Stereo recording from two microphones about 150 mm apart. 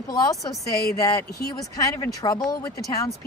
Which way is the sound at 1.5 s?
20° left (ahead or behind).